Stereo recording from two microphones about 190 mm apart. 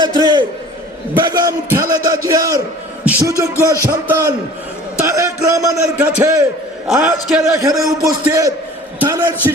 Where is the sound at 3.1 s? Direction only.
15° right (ahead or behind).